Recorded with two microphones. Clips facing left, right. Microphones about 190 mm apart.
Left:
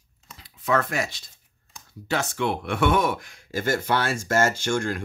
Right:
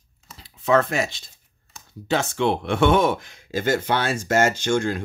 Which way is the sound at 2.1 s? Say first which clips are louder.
Right 4 dB; 25° right (ahead or behind).